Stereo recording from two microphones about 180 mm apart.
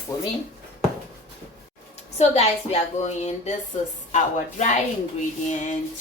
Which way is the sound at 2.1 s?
35° left (ahead or behind).